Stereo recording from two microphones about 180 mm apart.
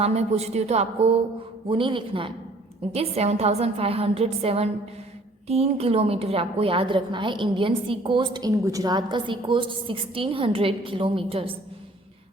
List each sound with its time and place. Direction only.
0.0 s a woman's voice: 35° right (ahead or behind)